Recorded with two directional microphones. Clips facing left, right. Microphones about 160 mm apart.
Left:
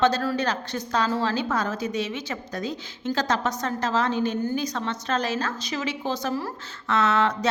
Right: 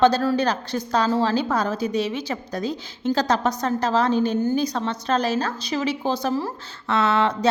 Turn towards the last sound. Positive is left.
turn(degrees=-30)  # may be behind; listen again after turning